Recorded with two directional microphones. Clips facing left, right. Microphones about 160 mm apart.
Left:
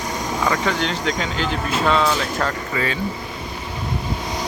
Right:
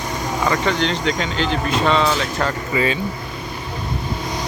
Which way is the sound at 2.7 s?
20° right (ahead or behind).